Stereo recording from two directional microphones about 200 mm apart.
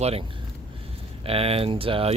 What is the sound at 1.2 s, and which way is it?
Speech, 30° right (ahead or behind).